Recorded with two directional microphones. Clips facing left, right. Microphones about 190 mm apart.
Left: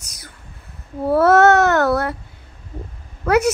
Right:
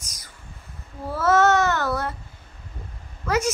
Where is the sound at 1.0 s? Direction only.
60° left (ahead or behind).